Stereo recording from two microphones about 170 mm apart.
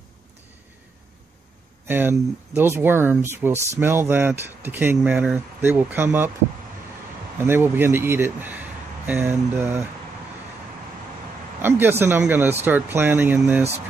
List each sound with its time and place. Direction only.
1.9 s speech: 10° right (ahead or behind)
7.3 s speech: 15° right (ahead or behind)
11.6 s speech: 15° right (ahead or behind)